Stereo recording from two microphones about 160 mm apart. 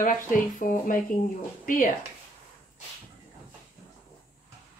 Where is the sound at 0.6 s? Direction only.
60° left (ahead or behind).